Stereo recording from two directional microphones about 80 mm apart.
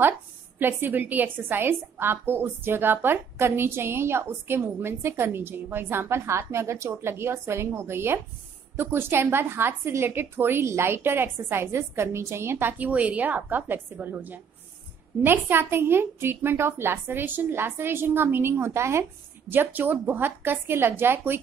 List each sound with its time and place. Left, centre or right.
0.6 s a woman's voice: right